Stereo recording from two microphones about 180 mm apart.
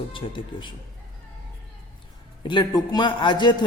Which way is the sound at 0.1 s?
30° left (ahead or behind).